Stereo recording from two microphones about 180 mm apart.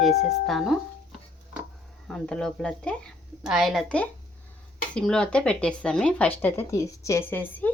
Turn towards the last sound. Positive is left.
turn(degrees=10)  # may be behind; listen again after turning